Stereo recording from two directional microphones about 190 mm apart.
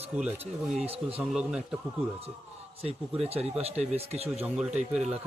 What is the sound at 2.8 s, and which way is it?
Speech, 30° right (ahead or behind).